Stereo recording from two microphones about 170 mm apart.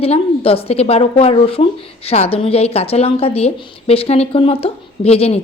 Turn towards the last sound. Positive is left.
turn(degrees=35)  # may be behind; listen again after turning